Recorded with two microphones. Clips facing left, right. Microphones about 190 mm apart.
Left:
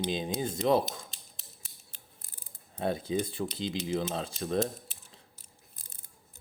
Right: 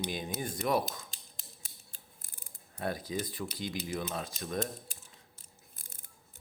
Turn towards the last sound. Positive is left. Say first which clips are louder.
# left 5 dB
turn(degrees=30)  # may be behind; listen again after turning